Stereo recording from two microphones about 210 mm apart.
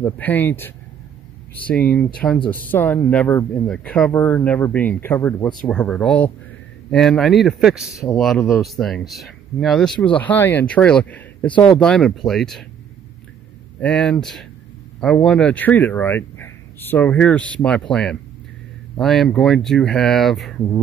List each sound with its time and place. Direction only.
0.0 s speech: 10° left (ahead or behind)
13.7 s speech: 5° left (ahead or behind)